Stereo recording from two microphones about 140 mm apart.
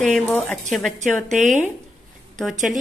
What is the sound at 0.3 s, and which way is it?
Speech, 10° left (ahead or behind).